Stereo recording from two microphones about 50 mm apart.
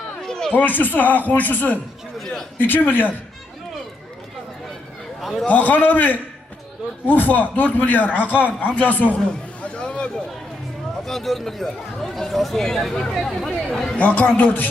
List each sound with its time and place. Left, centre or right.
0.2 s a sound: centre
0.5 s speech: left
2.1 s a sound: centre
2.6 s speech: left
5.2 s a man's voice: centre
5.5 s speech: left
8.3 s speech: right
8.6 s a man's voice: left
11.0 s speech: centre
14.0 s speech: left